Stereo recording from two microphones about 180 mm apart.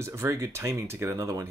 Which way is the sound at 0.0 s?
15° right (ahead or behind).